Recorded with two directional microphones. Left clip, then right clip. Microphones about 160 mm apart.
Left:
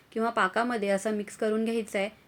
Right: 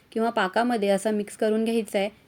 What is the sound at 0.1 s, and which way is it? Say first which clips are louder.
A woman's voice: right 2 dB; 30° right (ahead or behind).